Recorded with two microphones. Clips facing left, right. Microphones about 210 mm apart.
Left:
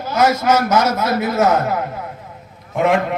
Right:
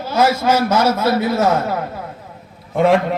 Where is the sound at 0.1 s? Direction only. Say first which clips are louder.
Even; 30° right (ahead or behind).